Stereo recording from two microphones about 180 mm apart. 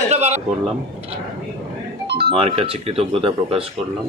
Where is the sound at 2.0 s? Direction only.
65° right (ahead or behind).